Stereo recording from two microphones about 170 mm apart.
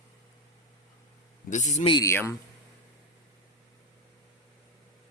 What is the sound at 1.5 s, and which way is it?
Speech, 45° left (ahead or behind).